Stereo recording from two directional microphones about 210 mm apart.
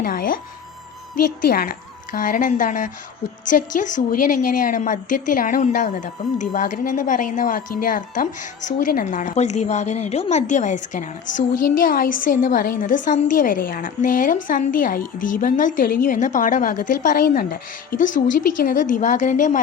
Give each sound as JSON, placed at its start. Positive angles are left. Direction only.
{"t": 0.0, "sound": "speech", "side_deg": 40}
{"t": 1.5, "sound": "a woman's voice", "side_deg": 45}